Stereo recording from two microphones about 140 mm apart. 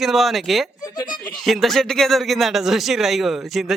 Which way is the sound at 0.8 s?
25° left (ahead or behind).